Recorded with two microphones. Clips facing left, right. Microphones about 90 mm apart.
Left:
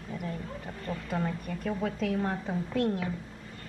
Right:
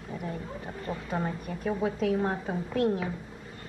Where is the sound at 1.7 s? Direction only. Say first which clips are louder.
Right 3 dB; 15° right (ahead or behind).